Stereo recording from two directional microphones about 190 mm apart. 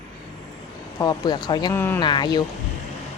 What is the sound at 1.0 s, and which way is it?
Speech, 20° left (ahead or behind).